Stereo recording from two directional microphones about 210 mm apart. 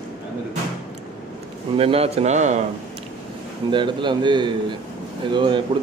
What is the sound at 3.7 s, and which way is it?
A man's voice, 20° right (ahead or behind).